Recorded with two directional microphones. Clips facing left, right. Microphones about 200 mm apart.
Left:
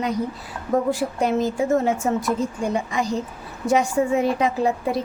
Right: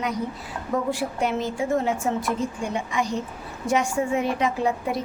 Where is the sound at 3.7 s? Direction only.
35° left (ahead or behind).